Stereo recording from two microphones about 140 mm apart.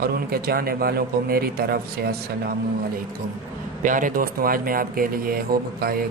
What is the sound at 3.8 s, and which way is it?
Speech, 70° right (ahead or behind).